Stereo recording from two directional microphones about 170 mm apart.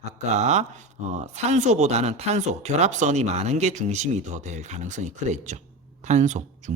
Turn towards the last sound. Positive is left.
turn(degrees=-45)  # may be behind; listen again after turning